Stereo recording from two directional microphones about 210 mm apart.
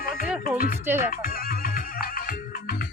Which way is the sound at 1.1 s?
45° left (ahead or behind).